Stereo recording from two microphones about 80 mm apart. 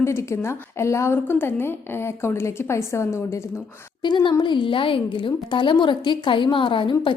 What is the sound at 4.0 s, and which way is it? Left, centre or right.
Speech, left.